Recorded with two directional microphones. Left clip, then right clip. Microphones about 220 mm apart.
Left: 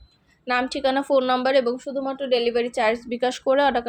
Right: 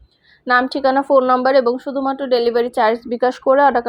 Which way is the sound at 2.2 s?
Centre (ahead or behind).